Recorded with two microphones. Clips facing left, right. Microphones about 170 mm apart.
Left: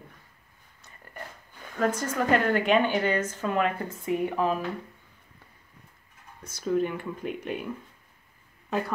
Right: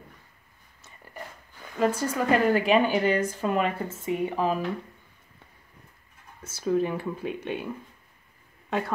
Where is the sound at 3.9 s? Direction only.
Centre (ahead or behind).